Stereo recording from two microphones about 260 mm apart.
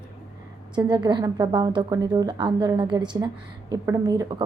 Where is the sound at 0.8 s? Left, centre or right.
Centre.